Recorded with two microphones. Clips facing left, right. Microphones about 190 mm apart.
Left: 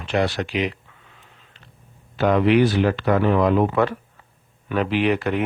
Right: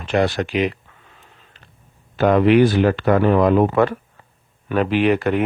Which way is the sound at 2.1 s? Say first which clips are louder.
Right 3 dB; 50° right (ahead or behind).